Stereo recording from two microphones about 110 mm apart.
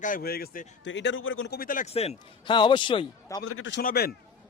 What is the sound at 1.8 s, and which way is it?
Speech, 75° left (ahead or behind).